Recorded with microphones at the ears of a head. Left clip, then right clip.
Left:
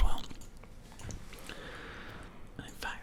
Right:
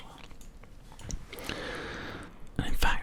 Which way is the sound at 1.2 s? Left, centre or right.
Right.